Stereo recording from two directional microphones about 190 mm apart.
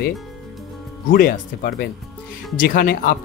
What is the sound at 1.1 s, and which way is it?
Speech, 50° left (ahead or behind).